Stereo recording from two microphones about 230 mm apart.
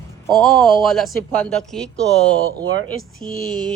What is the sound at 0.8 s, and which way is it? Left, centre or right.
Speech, centre.